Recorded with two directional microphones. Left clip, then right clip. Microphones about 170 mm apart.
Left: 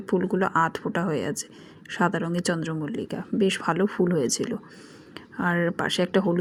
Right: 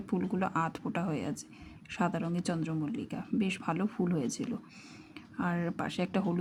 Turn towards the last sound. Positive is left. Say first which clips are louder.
# left 11 dB
turn(degrees=15)  # may be behind; listen again after turning